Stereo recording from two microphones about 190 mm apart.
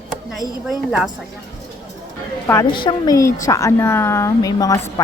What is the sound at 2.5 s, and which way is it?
A woman's voice, 10° left (ahead or behind).